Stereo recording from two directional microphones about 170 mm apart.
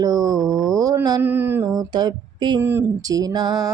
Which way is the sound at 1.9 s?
25° right (ahead or behind).